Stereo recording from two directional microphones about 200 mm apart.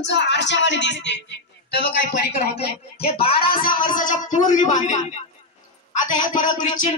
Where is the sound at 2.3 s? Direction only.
30° left (ahead or behind).